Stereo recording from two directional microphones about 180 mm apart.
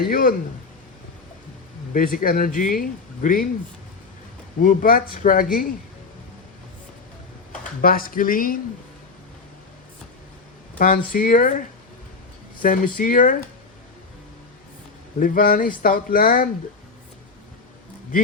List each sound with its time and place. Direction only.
0.0 s speech: 50° left (ahead or behind)
1.9 s speech: 50° left (ahead or behind)
4.6 s speech: 50° left (ahead or behind)
7.8 s speech: 50° left (ahead or behind)
10.8 s speech: 50° left (ahead or behind)
15.2 s speech: 50° left (ahead or behind)